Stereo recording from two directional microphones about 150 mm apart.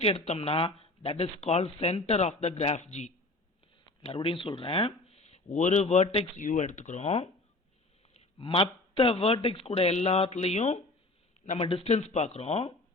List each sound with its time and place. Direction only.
0.0 s speech: 40° left (ahead or behind)
4.0 s speech: 40° left (ahead or behind)